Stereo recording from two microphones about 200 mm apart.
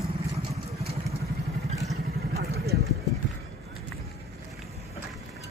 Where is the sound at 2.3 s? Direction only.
50° right (ahead or behind).